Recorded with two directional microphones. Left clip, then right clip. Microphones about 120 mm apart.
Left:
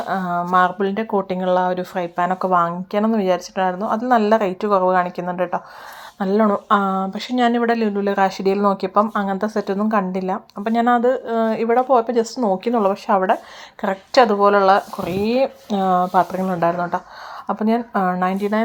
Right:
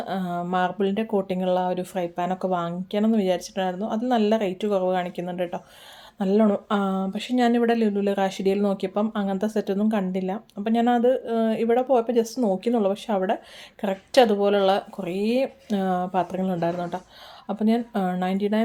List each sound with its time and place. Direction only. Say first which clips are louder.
0.1 s speech: left 9 dB; 10° right (ahead or behind)
4.8 s speech: left 7 dB; 45° left (ahead or behind)
5.2 s speech: left 7 dB; 20° right (ahead or behind)
6.1 s speech: left 4 dB; 10° right (ahead or behind)